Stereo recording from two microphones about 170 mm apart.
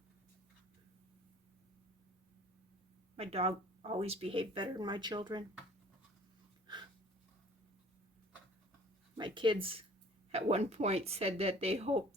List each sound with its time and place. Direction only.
3.2 s speech: 35° right (ahead or behind)
9.1 s speech: 30° right (ahead or behind)